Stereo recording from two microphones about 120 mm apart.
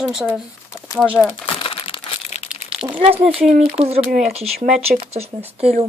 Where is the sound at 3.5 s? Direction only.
85° right; by 5.9 s 55° right (ahead or behind).